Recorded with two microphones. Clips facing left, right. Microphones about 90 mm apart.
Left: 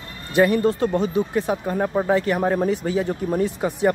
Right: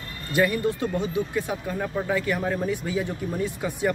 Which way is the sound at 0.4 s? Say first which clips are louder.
Left 6 dB; 35° left (ahead or behind).